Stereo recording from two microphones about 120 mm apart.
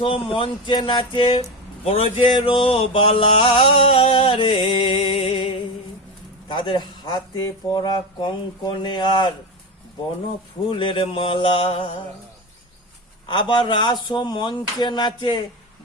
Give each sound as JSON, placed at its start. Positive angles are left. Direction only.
{"t": 0.0, "sound": "speech", "side_deg": 50}
{"t": 10.7, "sound": "speech", "side_deg": 45}
{"t": 13.2, "sound": "speech", "side_deg": 40}